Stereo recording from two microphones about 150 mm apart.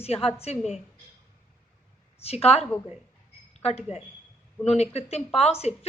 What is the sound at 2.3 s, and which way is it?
Speech, 45° left (ahead or behind).